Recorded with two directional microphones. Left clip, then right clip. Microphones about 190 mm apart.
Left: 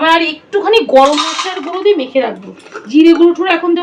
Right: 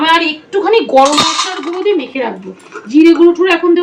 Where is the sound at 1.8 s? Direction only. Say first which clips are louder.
Left 4 dB; 30° left (ahead or behind).